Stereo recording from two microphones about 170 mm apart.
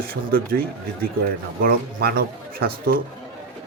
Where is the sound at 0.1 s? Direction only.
60° right (ahead or behind).